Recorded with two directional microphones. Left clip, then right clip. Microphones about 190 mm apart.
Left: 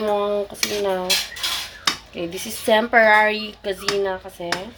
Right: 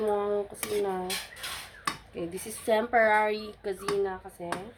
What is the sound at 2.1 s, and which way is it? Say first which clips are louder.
Speech: left 8 dB; centre (ahead or behind).